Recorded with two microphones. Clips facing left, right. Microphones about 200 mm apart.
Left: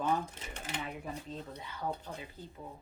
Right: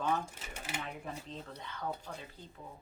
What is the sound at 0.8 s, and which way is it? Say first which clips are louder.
A woman's voice: left 3 dB; 5° left (ahead or behind).